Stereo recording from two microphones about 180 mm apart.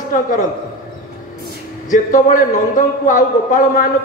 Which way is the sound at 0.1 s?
45° left (ahead or behind).